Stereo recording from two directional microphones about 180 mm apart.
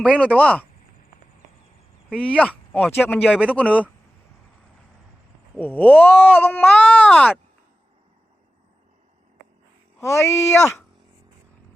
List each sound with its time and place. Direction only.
0.0 s speech: 5° left (ahead or behind)
2.1 s speech: 5° left (ahead or behind)
5.5 s speech: 10° left (ahead or behind)
10.0 s speech: 15° left (ahead or behind)